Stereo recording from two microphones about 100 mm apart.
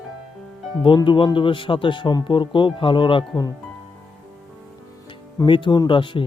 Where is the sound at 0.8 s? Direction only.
55° left (ahead or behind).